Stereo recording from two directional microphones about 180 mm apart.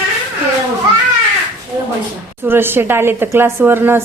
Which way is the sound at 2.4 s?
10° right (ahead or behind).